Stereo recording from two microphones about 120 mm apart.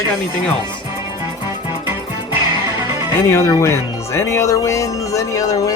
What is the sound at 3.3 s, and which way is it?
Speech, 25° left (ahead or behind).